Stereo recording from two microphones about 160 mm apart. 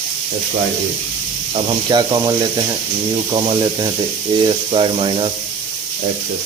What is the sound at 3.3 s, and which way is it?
Speech, 30° right (ahead or behind).